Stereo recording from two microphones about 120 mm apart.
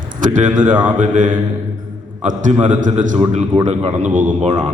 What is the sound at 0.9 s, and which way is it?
Mantra, 90° right.